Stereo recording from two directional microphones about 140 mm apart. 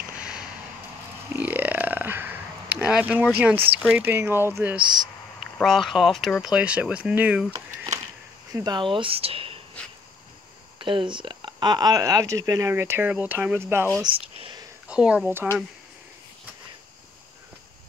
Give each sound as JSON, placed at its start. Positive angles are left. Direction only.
{"t": 0.2, "sound": "a sound", "side_deg": -10}
{"t": 1.3, "sound": "burping", "side_deg": -15}
{"t": 3.3, "sound": "speech", "side_deg": -15}
{"t": 5.6, "sound": "speech", "side_deg": 0}
{"t": 8.5, "sound": "speech", "side_deg": -25}
{"t": 10.8, "sound": "speech", "side_deg": -35}
{"t": 14.0, "sound": "speech", "side_deg": -40}
{"t": 14.9, "sound": "speech", "side_deg": -10}